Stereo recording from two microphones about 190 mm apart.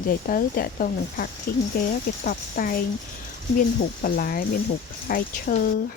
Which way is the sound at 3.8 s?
50° left (ahead or behind).